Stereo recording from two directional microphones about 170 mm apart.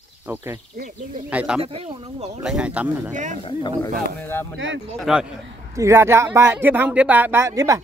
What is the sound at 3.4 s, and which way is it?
Speech, 30° left (ahead or behind).